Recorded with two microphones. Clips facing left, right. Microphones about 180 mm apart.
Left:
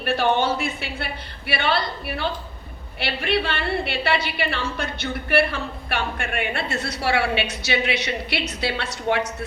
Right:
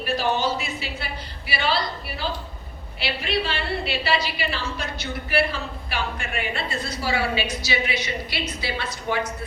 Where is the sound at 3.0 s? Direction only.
60° left (ahead or behind).